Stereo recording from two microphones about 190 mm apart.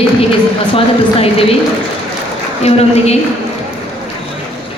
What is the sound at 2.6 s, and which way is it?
Speech, 35° left (ahead or behind).